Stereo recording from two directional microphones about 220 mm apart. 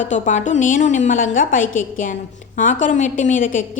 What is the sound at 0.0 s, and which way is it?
A woman's voice, 35° left (ahead or behind).